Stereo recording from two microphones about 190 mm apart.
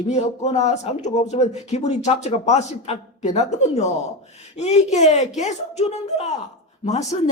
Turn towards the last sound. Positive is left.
turn(degrees=35)  # may be behind; listen again after turning